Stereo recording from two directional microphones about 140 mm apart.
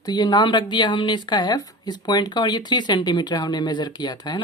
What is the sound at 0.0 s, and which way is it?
A woman's voice, 30° left (ahead or behind).